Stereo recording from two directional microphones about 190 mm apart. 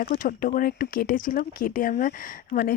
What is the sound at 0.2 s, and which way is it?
Speech, 45° left (ahead or behind).